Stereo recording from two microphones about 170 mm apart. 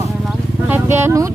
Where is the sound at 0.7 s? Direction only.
15° right (ahead or behind).